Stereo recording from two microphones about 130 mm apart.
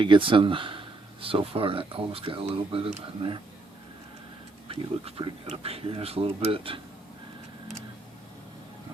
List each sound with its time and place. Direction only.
0.0 s speech: 40° right (ahead or behind)
4.7 s speech: 45° right (ahead or behind)